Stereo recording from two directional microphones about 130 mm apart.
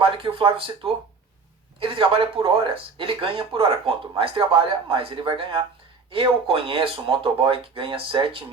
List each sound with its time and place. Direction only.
0.0 s speech: 45° right (ahead or behind)